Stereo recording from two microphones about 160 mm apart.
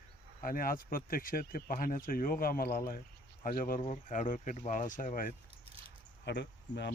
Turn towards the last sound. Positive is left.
turn(degrees=90)